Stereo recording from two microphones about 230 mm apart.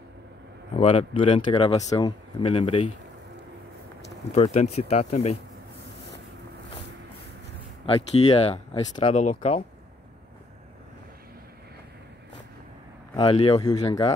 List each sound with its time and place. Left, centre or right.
0.7 s speech: left
4.3 s speech: left
7.8 s speech: left
13.1 s speech: left